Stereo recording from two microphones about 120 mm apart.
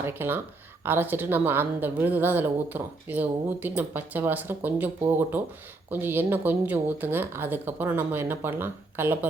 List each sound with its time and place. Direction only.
0.0 s speech: 20° right (ahead or behind)